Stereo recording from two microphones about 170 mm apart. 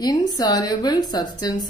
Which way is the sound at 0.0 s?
25° left (ahead or behind).